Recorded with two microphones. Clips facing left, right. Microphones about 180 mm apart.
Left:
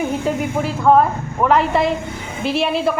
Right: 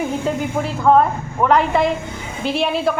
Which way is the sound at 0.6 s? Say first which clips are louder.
Even; 5° left (ahead or behind).